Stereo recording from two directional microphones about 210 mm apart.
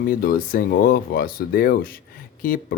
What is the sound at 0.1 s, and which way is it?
Speech, 45° left (ahead or behind).